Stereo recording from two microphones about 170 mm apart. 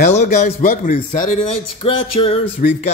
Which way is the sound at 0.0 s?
40° left (ahead or behind).